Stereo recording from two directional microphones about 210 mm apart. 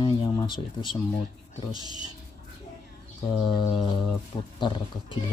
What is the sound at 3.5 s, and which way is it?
Speech, 20° left (ahead or behind).